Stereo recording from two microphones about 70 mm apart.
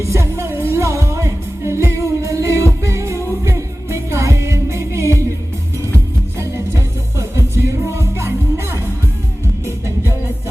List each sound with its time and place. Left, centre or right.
0.0 s music: right
7.3 s music: right